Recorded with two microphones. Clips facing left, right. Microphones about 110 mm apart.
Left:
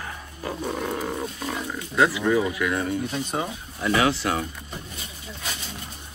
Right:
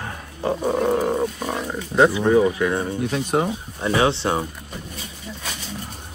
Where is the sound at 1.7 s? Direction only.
25° right (ahead or behind).